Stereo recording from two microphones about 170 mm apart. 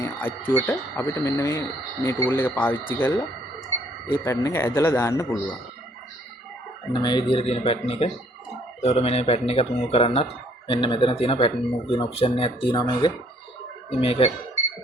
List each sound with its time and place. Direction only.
0.0 s speech: 10° left (ahead or behind)
6.9 s speech: 25° left (ahead or behind)